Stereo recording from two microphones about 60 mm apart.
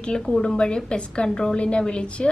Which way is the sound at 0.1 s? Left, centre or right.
Centre.